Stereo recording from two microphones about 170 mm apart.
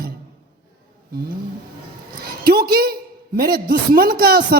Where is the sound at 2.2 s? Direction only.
60° right (ahead or behind).